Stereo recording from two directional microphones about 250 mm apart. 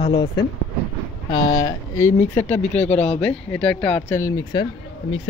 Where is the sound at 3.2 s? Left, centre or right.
Centre.